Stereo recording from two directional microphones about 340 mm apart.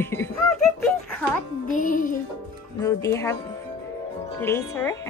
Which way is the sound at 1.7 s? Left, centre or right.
Left.